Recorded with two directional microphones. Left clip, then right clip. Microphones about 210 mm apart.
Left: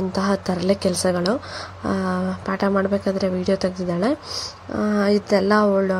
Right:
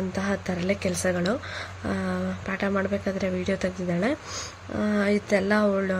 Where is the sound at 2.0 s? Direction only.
Centre (ahead or behind).